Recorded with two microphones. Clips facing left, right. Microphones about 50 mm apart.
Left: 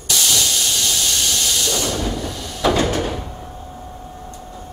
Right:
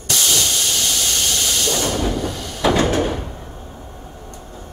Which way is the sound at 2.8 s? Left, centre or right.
Right.